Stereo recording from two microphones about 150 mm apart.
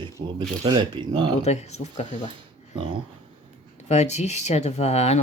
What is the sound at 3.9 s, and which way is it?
Speech, 50° left (ahead or behind).